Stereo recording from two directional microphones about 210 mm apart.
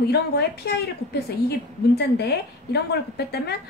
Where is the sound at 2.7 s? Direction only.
50° left (ahead or behind).